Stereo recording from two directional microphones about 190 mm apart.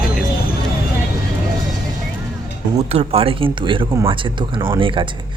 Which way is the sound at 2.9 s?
30° right (ahead or behind).